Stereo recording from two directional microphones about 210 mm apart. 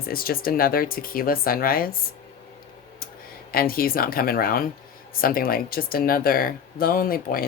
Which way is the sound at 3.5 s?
45° left (ahead or behind).